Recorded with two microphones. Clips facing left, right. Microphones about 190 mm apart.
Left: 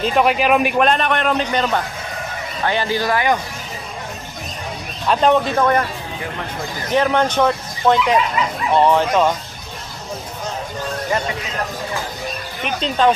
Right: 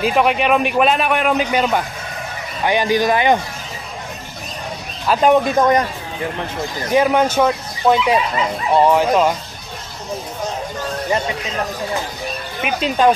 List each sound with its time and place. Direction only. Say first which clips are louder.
0.0 s a man's voice: even; centre (ahead or behind); by 3.3 s 20° right (ahead or behind)
5.0 s speech: right 2 dB; 5° right (ahead or behind)
6.9 s speech: right 2 dB; 10° right (ahead or behind)
12.6 s speech: right 2 dB; 10° right (ahead or behind)